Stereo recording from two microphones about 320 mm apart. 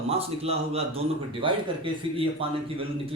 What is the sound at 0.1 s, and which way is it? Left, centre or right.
Speech, centre.